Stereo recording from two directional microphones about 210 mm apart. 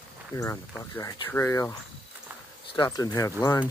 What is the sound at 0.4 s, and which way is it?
Speech, 15° left (ahead or behind).